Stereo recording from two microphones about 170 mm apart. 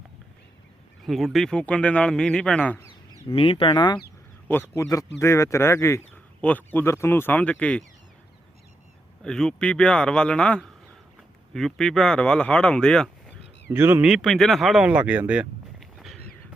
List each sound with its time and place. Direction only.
1.0 s speech: centre (ahead or behind)
3.3 s speech: 30° left (ahead or behind)
4.4 s speech: 15° left (ahead or behind)
9.2 s speech: 5° left (ahead or behind)
13.7 s speech: 15° right (ahead or behind)
14.1 s speech: centre (ahead or behind)